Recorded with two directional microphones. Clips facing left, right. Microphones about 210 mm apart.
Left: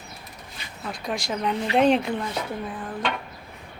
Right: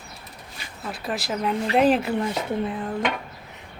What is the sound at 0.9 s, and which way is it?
Speech, 5° right (ahead or behind).